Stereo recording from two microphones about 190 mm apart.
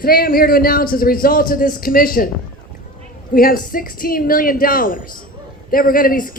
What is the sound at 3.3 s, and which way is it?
Speech, 50° left (ahead or behind).